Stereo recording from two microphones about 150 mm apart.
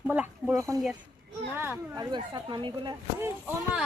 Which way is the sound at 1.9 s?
30° right (ahead or behind).